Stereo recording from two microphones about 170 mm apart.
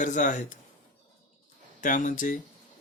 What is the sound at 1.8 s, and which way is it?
Speech, 50° left (ahead or behind).